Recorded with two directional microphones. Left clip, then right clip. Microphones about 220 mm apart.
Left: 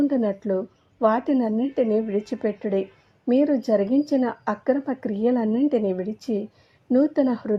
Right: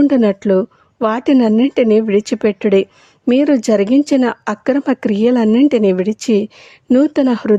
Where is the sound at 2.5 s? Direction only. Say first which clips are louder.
Right 12 dB; 60° right (ahead or behind).